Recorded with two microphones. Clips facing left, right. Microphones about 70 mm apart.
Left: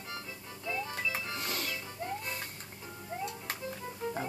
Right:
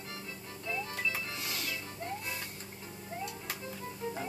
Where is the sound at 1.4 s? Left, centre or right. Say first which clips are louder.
Left 3 dB; left.